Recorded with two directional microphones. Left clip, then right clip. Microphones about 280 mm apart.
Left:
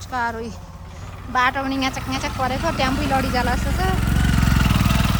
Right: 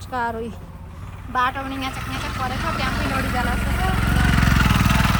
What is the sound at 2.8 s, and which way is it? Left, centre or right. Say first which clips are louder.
Speech: left 5 dB; centre.